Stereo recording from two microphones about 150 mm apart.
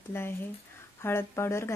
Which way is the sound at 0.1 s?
15° left (ahead or behind).